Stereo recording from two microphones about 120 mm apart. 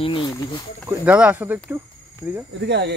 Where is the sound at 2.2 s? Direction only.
25° right (ahead or behind).